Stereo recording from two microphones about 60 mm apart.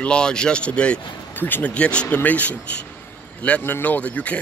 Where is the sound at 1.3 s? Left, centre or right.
Left.